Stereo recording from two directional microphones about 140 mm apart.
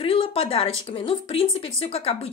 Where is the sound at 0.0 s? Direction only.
40° left (ahead or behind).